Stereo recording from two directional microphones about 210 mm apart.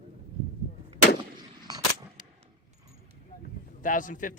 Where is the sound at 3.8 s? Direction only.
40° left (ahead or behind).